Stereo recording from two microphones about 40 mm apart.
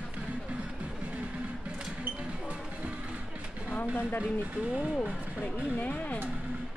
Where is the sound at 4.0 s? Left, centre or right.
Left.